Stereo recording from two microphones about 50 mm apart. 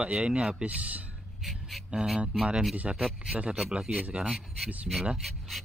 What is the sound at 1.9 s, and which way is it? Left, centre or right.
Speech, centre.